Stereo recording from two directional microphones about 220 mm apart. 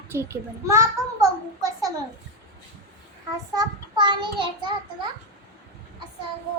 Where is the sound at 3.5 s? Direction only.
20° right (ahead or behind).